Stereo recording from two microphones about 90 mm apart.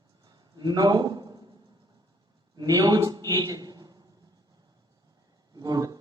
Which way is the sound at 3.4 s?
45° right (ahead or behind).